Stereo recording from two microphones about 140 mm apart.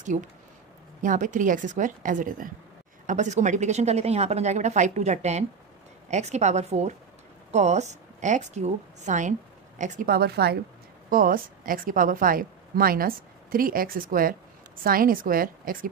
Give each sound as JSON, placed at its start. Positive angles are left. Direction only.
{"t": 0.1, "sound": "a woman's voice", "side_deg": -55}
{"t": 3.1, "sound": "a woman's voice", "side_deg": -60}